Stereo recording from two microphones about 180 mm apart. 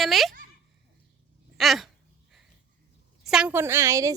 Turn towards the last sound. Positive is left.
turn(degrees=-15)  # may be behind; listen again after turning